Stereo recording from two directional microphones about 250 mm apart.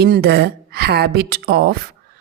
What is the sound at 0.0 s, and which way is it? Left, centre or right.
A woman's voice, right.